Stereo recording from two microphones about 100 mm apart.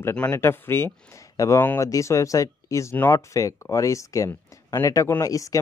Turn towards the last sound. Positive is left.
turn(degrees=35)  # may be behind; listen again after turning